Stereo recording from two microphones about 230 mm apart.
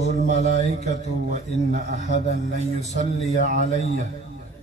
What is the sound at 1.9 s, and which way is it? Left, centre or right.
Speech, left.